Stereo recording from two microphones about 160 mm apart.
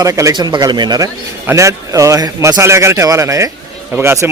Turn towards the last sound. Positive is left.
turn(degrees=-15)  # may be behind; listen again after turning